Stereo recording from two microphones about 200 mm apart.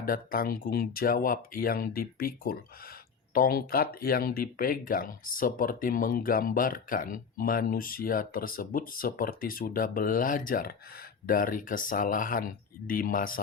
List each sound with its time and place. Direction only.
0.0 s speech: 45° left (ahead or behind)